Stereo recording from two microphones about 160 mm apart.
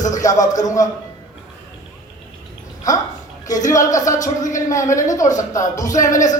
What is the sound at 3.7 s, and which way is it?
A man's voice, 20° left (ahead or behind).